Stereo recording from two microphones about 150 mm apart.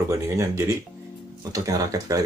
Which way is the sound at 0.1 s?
20° right (ahead or behind).